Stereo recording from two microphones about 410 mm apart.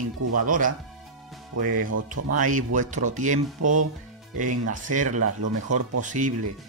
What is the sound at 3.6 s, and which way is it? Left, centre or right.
Speech, right.